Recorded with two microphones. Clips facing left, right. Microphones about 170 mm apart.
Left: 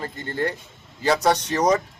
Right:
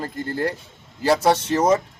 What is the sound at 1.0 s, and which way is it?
Speech, 5° right (ahead or behind).